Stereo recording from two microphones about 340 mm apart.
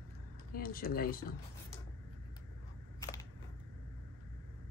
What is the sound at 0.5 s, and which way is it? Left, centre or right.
Speech, left.